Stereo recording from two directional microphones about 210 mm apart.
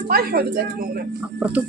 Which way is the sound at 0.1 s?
45° right (ahead or behind).